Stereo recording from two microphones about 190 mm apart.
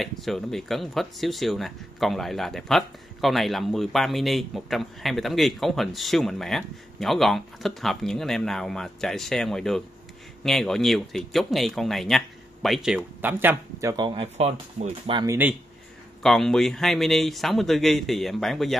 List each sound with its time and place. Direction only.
0.0 s speech: centre (ahead or behind); by 15.3 s 25° right (ahead or behind)
16.2 s speech: centre (ahead or behind)